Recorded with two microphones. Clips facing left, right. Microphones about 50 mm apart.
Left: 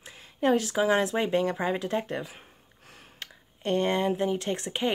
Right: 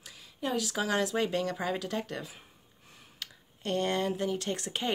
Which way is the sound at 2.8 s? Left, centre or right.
Left.